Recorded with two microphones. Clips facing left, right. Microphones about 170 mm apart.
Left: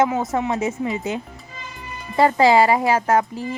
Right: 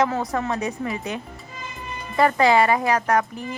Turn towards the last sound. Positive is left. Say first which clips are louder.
# left 3 dB
turn(degrees=30)  # may be behind; listen again after turning